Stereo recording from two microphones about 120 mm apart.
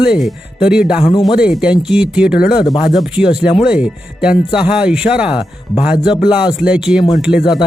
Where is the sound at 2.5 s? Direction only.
40° left (ahead or behind).